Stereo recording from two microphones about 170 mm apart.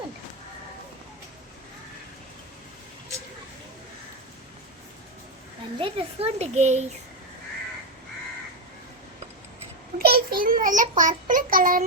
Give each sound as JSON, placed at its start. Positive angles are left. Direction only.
{"t": 5.8, "sound": "speech", "side_deg": -35}
{"t": 10.0, "sound": "child singing", "side_deg": -65}